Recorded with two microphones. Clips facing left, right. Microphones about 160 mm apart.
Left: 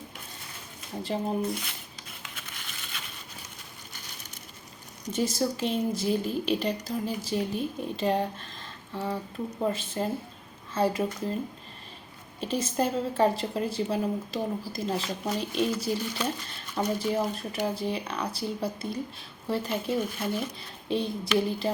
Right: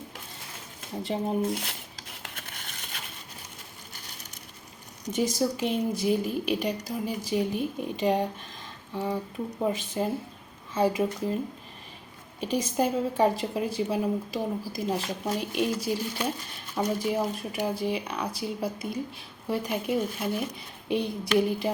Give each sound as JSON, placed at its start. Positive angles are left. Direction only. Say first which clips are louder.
{"t": 1.0, "sound": "speech", "louder": "right 1 dB", "side_deg": -20}
{"t": 1.5, "sound": "a sound", "louder": "right 2 dB", "side_deg": -75}
{"t": 5.1, "sound": "a woman's voice", "louder": "right 1 dB", "side_deg": -15}
{"t": 12.4, "sound": "a woman's voice", "louder": "right 1 dB", "side_deg": -15}